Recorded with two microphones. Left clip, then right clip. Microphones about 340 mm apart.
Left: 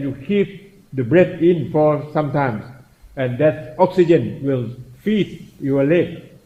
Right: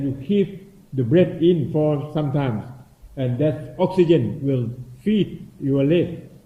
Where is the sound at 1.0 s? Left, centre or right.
Left.